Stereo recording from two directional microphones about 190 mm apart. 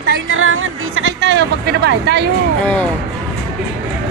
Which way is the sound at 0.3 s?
90° right.